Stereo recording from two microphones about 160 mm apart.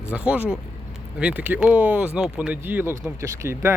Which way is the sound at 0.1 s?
10° right (ahead or behind).